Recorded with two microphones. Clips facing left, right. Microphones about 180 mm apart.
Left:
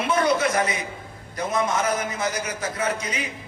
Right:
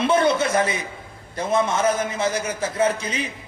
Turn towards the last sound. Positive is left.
turn(degrees=-30)  # may be behind; listen again after turning